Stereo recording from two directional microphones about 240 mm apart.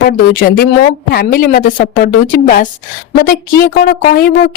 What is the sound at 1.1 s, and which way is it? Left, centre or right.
Speech, left.